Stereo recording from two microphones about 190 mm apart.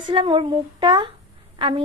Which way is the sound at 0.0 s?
25° right (ahead or behind).